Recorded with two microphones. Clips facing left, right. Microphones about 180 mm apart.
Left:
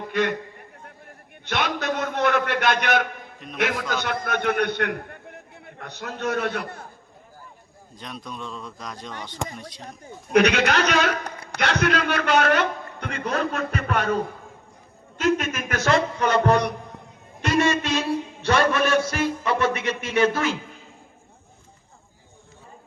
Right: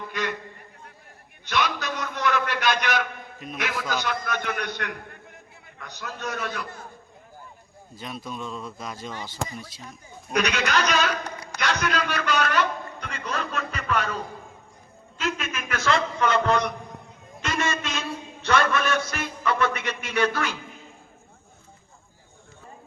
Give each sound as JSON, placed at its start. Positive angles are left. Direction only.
{"t": 0.1, "sound": "a man's voice", "side_deg": 55}
{"t": 1.5, "sound": "a man's voice", "side_deg": 55}
{"t": 7.9, "sound": "a man's voice", "side_deg": -5}
{"t": 10.3, "sound": "a man's voice", "side_deg": 60}
{"t": 15.2, "sound": "a woman's voice", "side_deg": 45}
{"t": 16.3, "sound": "music", "side_deg": 40}
{"t": 17.5, "sound": "a sound", "side_deg": 35}
{"t": 18.7, "sound": "music", "side_deg": 30}